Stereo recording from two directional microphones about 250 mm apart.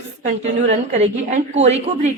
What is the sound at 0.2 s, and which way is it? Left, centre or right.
A woman's voice, right.